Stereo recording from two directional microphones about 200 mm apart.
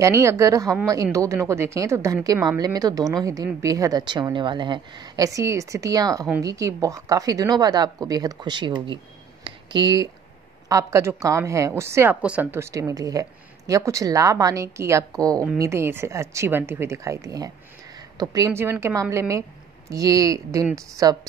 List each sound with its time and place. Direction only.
0.0 s a woman's voice: 15° right (ahead or behind)